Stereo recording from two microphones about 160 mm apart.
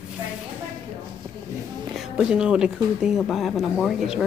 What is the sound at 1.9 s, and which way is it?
Speech, 5° right (ahead or behind).